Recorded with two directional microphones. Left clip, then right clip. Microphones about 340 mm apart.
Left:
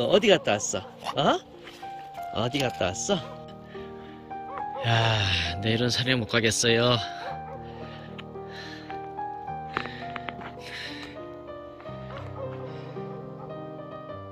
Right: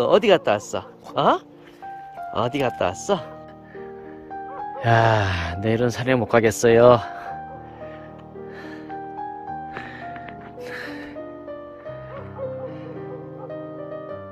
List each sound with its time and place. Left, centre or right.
0.0 s speech: centre
4.7 s speech: centre
10.7 s music: centre